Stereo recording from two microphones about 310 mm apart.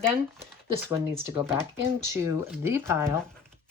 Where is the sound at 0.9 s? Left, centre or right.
Centre.